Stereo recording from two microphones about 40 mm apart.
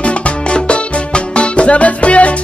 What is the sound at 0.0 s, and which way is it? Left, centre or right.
Music, left.